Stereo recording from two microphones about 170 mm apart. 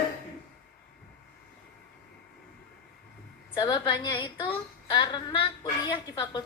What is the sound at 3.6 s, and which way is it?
A woman's voice, 25° left (ahead or behind).